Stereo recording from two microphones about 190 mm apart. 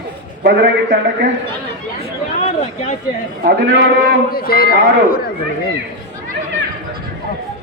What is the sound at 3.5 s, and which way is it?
Speech, 55° right (ahead or behind).